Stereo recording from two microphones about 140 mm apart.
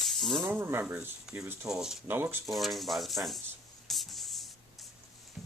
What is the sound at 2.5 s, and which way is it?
Speech, centre (ahead or behind).